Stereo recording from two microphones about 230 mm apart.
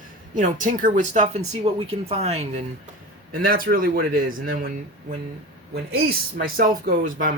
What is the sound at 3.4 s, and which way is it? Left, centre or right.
Speech, right.